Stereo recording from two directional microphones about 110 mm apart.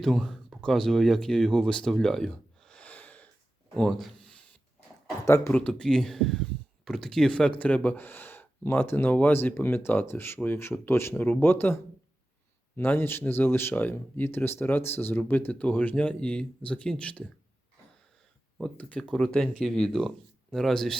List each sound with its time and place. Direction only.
0.0 s speech: centre (ahead or behind)
3.8 s speech: centre (ahead or behind)
5.2 s speech: 20° left (ahead or behind)
18.6 s speech: 10° left (ahead or behind)